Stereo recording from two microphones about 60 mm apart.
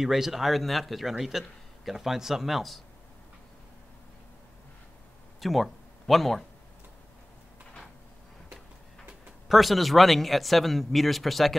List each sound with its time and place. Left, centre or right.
0.0 s a man's voice: centre
5.4 s speech: centre
9.5 s a man's voice: centre